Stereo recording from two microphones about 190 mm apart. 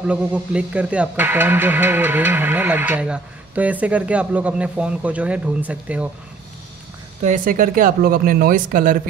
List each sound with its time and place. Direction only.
0.0 s speech: 5° right (ahead or behind)
7.2 s speech: 40° right (ahead or behind)